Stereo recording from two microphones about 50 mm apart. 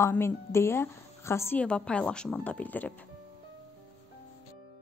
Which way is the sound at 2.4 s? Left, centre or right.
Left.